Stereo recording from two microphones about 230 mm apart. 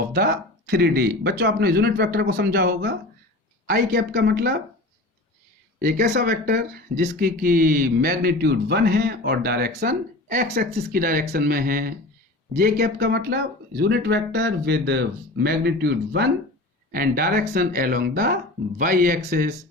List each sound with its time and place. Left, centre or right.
0.1 s speech: right
5.8 s speech: right